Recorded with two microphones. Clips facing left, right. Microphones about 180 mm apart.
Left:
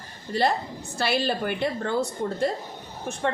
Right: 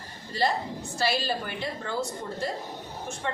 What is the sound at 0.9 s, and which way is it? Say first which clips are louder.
A woman's voice: left 3 dB; 60° left (ahead or behind).